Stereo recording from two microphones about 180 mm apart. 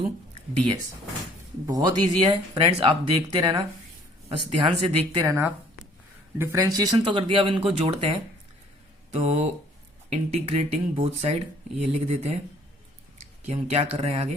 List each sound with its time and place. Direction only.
1.6 s speech: 20° right (ahead or behind); by 12.3 s 35° right (ahead or behind)
13.4 s speech: 35° right (ahead or behind)